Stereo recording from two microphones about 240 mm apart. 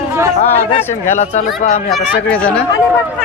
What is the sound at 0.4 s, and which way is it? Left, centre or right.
Speech, left.